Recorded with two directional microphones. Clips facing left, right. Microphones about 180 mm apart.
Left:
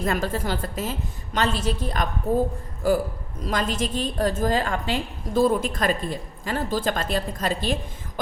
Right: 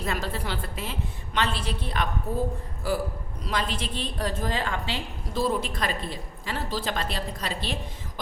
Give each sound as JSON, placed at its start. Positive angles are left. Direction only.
{"t": 0.0, "sound": "a woman's voice", "side_deg": 50}